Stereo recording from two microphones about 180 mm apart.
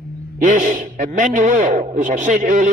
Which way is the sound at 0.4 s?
45° right (ahead or behind).